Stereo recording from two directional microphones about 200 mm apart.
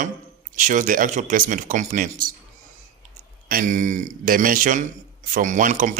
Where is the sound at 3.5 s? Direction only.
40° right (ahead or behind).